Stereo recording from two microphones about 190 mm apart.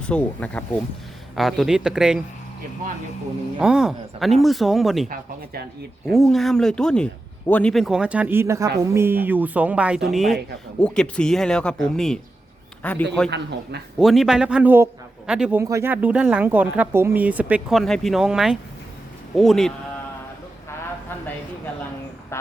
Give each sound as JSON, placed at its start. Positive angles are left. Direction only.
{"t": 0.0, "sound": "speech", "side_deg": 5}
{"t": 3.6, "sound": "speech", "side_deg": -5}
{"t": 5.0, "sound": "speech", "side_deg": -45}
{"t": 6.1, "sound": "a man's voice", "side_deg": 0}
{"t": 13.3, "sound": "a man's voice", "side_deg": -60}
{"t": 14.0, "sound": "speech", "side_deg": 0}